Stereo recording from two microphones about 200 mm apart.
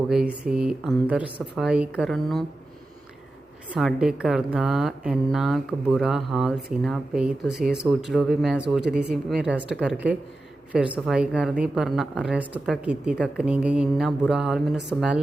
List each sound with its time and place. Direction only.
0.1 s a woman's voice: 5° right (ahead or behind)
3.8 s a woman's voice: centre (ahead or behind)